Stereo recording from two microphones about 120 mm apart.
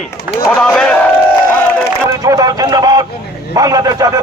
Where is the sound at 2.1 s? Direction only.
30° right (ahead or behind).